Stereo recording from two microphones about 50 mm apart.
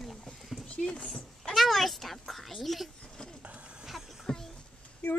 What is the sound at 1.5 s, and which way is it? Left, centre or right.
A child's voice, centre.